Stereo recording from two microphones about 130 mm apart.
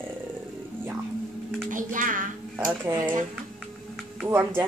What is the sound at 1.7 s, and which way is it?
Speech, 90° right.